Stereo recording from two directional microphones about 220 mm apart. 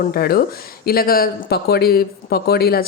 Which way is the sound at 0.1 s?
45° left (ahead or behind).